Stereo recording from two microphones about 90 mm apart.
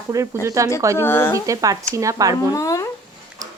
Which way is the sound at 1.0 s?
25° left (ahead or behind).